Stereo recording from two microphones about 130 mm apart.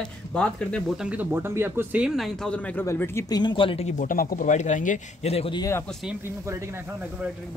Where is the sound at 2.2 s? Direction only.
5° left (ahead or behind); by 3.2 s 20° left (ahead or behind).